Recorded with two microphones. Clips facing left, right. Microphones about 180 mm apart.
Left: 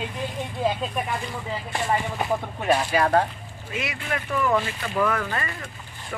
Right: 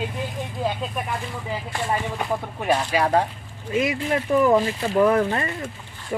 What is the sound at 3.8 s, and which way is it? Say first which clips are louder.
Speech: right 8 dB; 30° right (ahead or behind).